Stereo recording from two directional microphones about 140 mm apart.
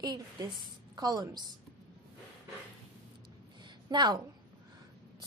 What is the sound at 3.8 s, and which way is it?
Speech, 30° right (ahead or behind).